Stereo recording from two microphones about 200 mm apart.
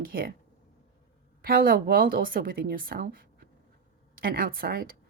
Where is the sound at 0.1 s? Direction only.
45° right (ahead or behind).